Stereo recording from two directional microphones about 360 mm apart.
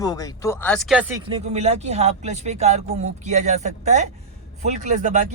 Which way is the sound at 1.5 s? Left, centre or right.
Centre.